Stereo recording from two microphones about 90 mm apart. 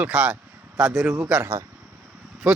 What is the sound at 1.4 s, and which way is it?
Speech, 30° right (ahead or behind).